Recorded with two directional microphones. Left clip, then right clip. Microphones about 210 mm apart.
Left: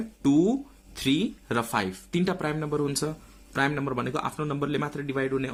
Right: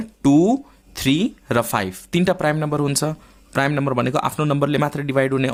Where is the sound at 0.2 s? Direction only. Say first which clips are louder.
Right 7 dB; 35° right (ahead or behind).